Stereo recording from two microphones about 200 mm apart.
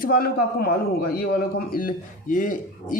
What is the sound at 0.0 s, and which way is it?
A man's voice, 45° left (ahead or behind).